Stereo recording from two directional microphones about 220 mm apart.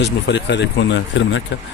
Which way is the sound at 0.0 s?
50° left (ahead or behind).